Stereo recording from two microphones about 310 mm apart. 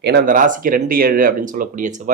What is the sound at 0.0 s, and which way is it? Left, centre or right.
Speech, right.